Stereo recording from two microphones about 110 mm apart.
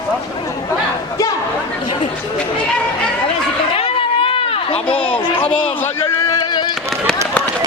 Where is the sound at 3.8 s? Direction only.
60° left (ahead or behind).